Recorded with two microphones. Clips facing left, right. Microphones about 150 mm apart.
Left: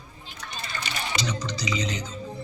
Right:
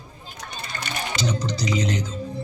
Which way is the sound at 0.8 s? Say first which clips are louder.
Right 4 dB; 50° right (ahead or behind).